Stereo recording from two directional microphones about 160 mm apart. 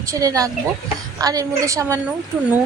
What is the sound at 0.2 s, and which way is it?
A woman's voice, 20° right (ahead or behind).